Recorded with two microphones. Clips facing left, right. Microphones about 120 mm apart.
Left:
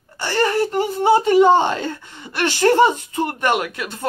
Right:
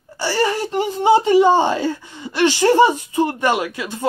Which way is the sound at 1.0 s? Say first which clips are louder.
Even; 15° right (ahead or behind).